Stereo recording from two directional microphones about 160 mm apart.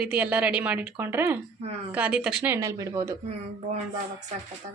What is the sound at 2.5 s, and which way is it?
Speech, 20° right (ahead or behind).